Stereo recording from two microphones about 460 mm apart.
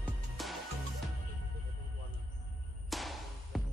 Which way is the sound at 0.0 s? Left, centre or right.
Centre.